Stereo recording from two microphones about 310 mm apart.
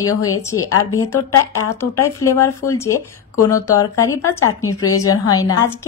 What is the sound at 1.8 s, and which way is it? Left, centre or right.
Speech, centre.